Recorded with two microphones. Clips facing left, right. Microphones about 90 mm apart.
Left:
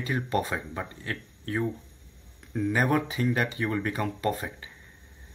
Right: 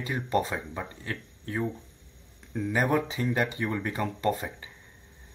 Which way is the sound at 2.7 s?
20° right (ahead or behind).